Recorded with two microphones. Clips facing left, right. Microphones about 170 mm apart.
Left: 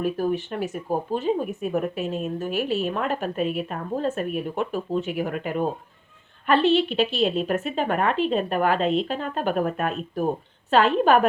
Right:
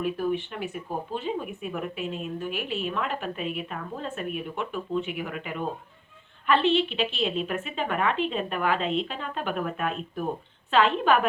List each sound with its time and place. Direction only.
0.0 s speech: 40° left (ahead or behind)